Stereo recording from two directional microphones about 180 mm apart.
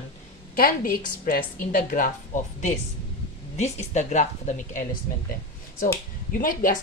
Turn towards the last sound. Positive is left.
turn(degrees=50)  # may be behind; listen again after turning